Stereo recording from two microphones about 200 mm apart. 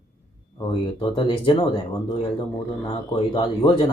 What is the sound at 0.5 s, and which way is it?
Speech, 25° left (ahead or behind).